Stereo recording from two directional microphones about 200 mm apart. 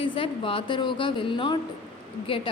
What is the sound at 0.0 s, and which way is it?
A woman's voice, 25° left (ahead or behind).